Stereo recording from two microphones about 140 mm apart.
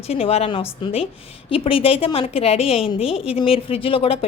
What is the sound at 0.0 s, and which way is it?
A woman's voice, 45° left (ahead or behind).